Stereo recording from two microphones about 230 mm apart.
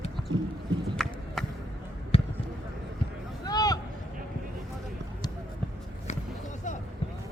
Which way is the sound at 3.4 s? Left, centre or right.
Centre.